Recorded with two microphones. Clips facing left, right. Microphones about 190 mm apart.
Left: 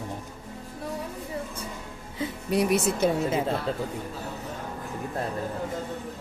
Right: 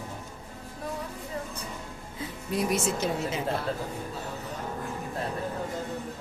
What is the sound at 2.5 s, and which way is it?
Speech, 65° left (ahead or behind).